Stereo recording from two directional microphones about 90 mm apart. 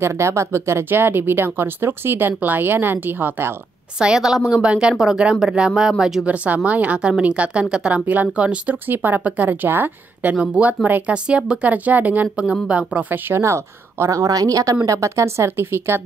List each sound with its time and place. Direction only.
0.0 s speech: 30° right (ahead or behind)
4.0 s a woman's voice: 5° right (ahead or behind)
10.3 s a woman's voice: 10° right (ahead or behind)
13.4 s speech: 30° right (ahead or behind)